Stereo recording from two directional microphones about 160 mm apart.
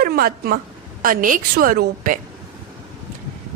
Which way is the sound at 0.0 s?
70° right (ahead or behind).